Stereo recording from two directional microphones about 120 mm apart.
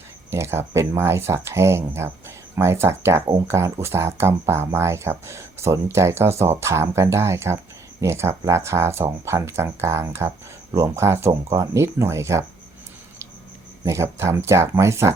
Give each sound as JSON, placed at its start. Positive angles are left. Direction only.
{"t": 0.3, "sound": "speech", "side_deg": -20}
{"t": 13.8, "sound": "speech", "side_deg": -25}